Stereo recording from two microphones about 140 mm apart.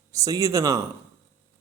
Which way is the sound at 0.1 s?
25° right (ahead or behind).